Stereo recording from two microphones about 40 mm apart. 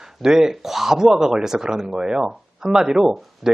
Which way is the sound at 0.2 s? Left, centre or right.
Centre.